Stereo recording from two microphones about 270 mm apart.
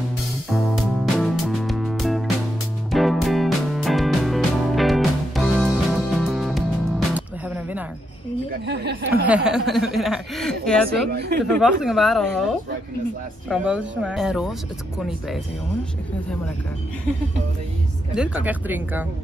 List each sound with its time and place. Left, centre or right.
1.1 s music: centre
8.5 s a sound: right
9.1 s chuckle: centre
11.1 s speech: right
11.5 s speech: centre
18.1 s speech: centre